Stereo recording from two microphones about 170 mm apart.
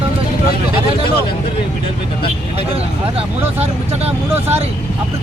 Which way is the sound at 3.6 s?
35° right (ahead or behind).